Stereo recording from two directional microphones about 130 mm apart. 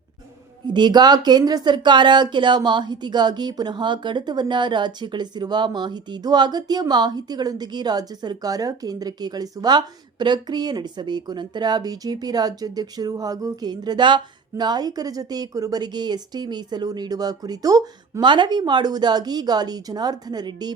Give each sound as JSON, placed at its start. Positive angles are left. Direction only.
{"t": 0.7, "sound": "speech", "side_deg": -35}